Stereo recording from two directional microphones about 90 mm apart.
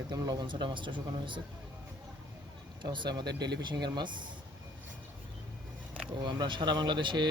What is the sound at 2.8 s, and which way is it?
Speech, 55° right (ahead or behind).